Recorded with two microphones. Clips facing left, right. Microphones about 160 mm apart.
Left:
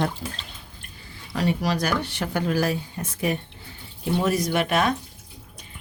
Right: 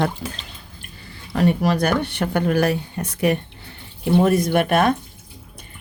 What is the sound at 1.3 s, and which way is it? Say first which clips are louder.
Speech: right 5 dB; 55° right (ahead or behind).